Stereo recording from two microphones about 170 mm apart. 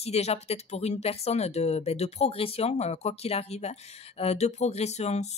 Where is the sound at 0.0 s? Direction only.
40° left (ahead or behind).